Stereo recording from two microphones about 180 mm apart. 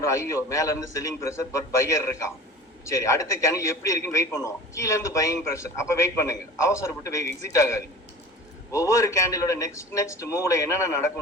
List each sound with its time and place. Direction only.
0.0 s a man's voice: 15° left (ahead or behind)